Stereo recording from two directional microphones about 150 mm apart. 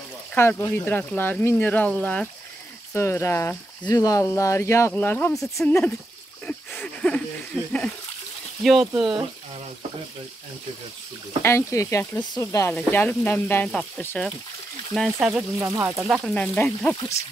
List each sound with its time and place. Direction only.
0.3 s speech: 15° left (ahead or behind)
5.3 s speech: centre (ahead or behind)
6.4 s a sound: 10° left (ahead or behind)
8.6 s speech: centre (ahead or behind)
11.4 s speech: 20° left (ahead or behind); by 16.2 s 15° right (ahead or behind)
16.3 s speech: 5° left (ahead or behind)